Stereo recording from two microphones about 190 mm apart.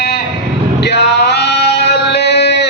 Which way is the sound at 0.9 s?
60° left (ahead or behind).